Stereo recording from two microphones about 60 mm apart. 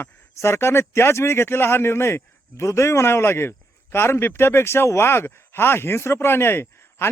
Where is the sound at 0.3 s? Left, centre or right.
Left.